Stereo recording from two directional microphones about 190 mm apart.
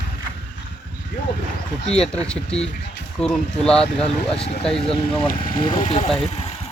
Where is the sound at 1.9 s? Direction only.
5° left (ahead or behind).